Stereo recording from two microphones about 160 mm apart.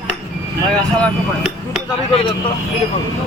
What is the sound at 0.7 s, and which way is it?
Speech, 5° left (ahead or behind).